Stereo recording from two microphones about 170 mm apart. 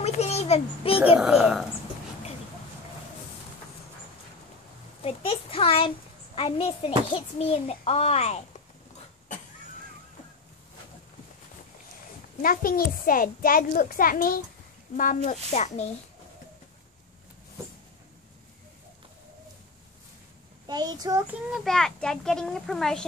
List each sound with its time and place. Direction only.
0.0 s a sound: 40° left (ahead or behind)
1.0 s a child's voice: 5° right (ahead or behind)
5.0 s a child's voice: 35° left (ahead or behind)
12.4 s a child's voice: 55° left (ahead or behind)
20.6 s a child's voice: 25° right (ahead or behind)
21.3 s a child's voice: 5° right (ahead or behind)